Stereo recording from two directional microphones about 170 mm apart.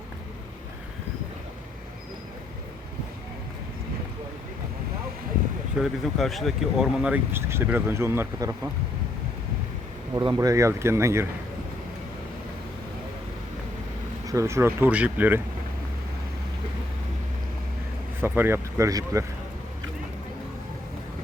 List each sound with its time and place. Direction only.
5.8 s speech: centre (ahead or behind); by 8.7 s 15° right (ahead or behind)
10.2 s speech: 20° right (ahead or behind)
14.3 s speech: 15° right (ahead or behind)
18.2 s speech: 15° right (ahead or behind)